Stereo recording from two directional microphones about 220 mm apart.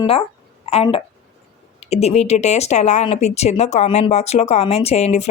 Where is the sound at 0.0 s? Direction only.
25° left (ahead or behind).